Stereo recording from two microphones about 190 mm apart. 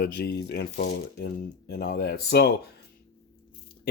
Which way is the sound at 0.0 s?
60° left (ahead or behind).